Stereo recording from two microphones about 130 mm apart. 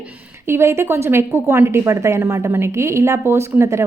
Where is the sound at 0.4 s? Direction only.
20° right (ahead or behind).